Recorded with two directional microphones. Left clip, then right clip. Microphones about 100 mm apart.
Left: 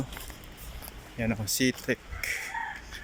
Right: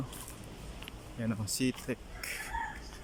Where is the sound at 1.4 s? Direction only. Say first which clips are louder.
Left 7 dB; 15° right (ahead or behind).